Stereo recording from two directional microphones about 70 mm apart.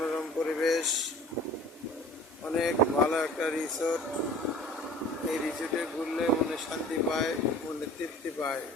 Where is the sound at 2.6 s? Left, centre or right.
Centre.